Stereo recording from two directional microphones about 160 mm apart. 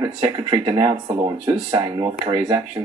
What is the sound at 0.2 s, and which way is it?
Speech, 30° right (ahead or behind).